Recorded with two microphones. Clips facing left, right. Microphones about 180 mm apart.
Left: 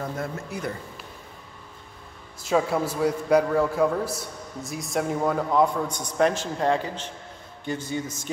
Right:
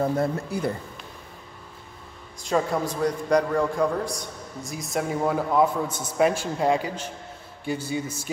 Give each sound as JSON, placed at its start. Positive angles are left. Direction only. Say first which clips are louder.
{"t": 0.0, "sound": "speech", "louder": "right 7 dB", "side_deg": -30}
{"t": 2.4, "sound": "a man's voice", "louder": "left 1 dB", "side_deg": 5}